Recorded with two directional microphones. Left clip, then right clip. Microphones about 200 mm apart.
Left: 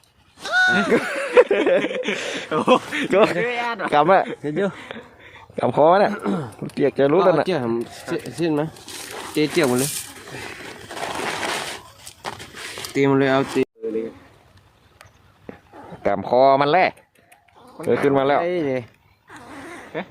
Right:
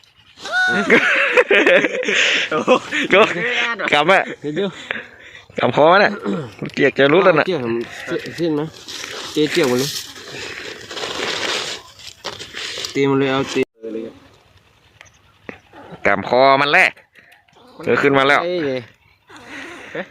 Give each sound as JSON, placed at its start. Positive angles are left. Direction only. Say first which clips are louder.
{"t": 0.4, "sound": "speech", "louder": "right 1 dB", "side_deg": 0}
{"t": 2.5, "sound": "speech", "louder": "right 2 dB", "side_deg": 50}
{"t": 3.1, "sound": "speech", "louder": "right 4 dB", "side_deg": -5}
{"t": 3.3, "sound": "speech", "louder": "right 3 dB", "side_deg": 50}
{"t": 3.9, "sound": "speech", "louder": "right 1 dB", "side_deg": -5}
{"t": 6.1, "sound": "speech", "louder": "right 2 dB", "side_deg": 15}
{"t": 6.7, "sound": "speech", "louder": "right 4 dB", "side_deg": 0}
{"t": 7.9, "sound": "speech", "louder": "right 3 dB", "side_deg": 40}
{"t": 8.4, "sound": "speech", "louder": "even", "side_deg": 10}
{"t": 10.4, "sound": "a sound", "louder": "right 5 dB", "side_deg": 40}
{"t": 13.0, "sound": "speech", "louder": "even", "side_deg": 5}
{"t": 16.0, "sound": "speech", "louder": "right 3 dB", "side_deg": 5}
{"t": 18.4, "sound": "speech", "louder": "right 2 dB", "side_deg": 40}